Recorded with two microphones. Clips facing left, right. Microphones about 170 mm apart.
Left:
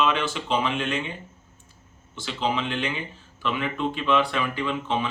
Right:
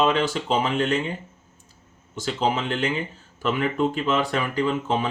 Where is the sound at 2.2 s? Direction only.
45° right (ahead or behind).